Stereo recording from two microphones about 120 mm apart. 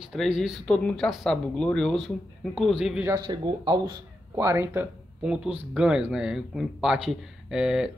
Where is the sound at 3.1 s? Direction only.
35° right (ahead or behind).